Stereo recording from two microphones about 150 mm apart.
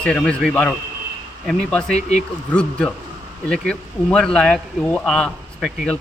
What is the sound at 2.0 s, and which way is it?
Speech, 50° left (ahead or behind).